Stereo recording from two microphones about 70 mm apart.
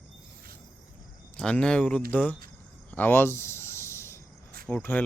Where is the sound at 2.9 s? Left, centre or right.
Left.